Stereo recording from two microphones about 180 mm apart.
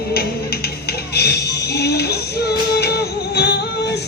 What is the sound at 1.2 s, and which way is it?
Music, 65° left (ahead or behind).